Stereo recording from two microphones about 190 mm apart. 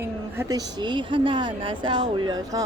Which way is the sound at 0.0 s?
15° right (ahead or behind).